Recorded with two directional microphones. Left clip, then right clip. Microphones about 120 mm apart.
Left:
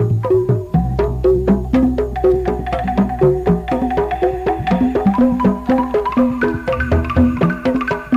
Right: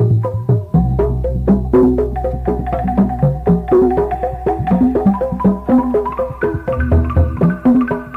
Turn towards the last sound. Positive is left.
turn(degrees=30)  # may be behind; listen again after turning